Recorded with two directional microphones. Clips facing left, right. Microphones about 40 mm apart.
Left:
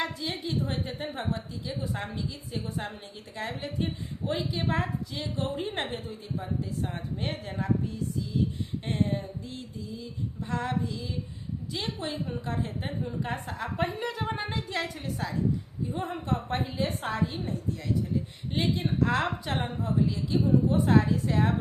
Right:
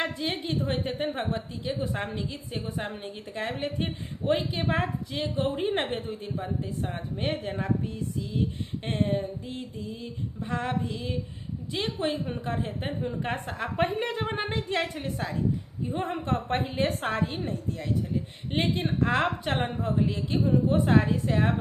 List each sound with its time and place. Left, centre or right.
0.0 s a woman's voice: right
2.6 s a woman's voice: right
9.7 s a woman's voice: right
10.5 s a woman's voice: right
18.5 s a woman's voice: right
19.0 s a woman's voice: right